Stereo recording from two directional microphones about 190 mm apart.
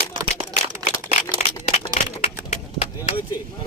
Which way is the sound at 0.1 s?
25° right (ahead or behind).